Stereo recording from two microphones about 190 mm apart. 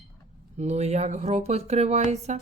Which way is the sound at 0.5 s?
35° right (ahead or behind).